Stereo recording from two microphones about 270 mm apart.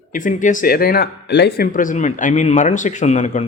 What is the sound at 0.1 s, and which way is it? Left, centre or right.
A man's voice, left.